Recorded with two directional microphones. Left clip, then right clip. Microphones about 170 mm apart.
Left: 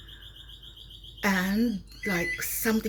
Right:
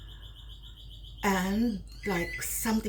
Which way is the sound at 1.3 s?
25° right (ahead or behind).